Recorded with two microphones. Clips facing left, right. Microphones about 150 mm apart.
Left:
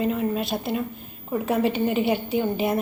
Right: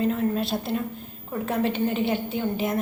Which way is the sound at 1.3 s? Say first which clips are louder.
Left 3 dB; 10° left (ahead or behind).